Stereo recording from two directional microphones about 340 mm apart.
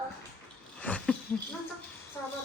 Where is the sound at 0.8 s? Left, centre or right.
Centre.